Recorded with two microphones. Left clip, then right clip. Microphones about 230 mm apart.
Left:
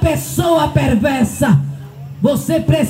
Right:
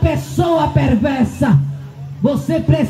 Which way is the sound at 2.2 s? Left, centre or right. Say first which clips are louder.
Left 2 dB; left.